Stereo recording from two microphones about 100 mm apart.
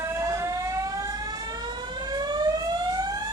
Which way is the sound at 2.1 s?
45° right (ahead or behind).